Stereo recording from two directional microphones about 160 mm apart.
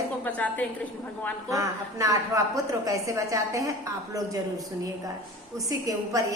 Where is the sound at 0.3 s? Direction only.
10° left (ahead or behind).